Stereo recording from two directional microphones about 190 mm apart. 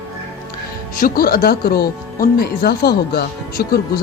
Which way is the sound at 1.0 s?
50° left (ahead or behind).